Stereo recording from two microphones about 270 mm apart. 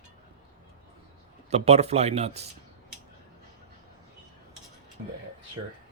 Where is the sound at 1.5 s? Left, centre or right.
Right.